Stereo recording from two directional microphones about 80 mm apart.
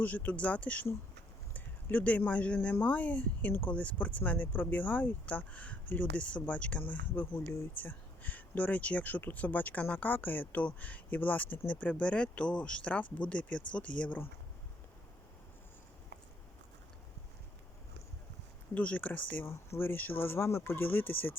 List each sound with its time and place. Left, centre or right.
0.0 s speech: left
18.7 s speech: centre
19.5 s speech: left